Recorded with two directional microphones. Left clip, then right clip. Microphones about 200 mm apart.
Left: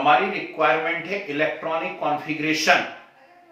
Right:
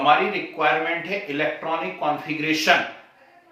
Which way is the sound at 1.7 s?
15° right (ahead or behind).